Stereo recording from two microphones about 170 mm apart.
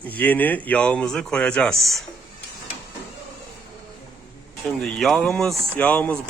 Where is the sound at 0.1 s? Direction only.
10° left (ahead or behind).